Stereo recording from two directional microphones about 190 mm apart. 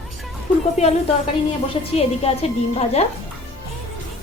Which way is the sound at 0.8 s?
35° left (ahead or behind).